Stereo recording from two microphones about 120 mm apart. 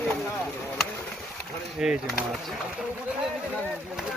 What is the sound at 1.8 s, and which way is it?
Speech, 5° right (ahead or behind).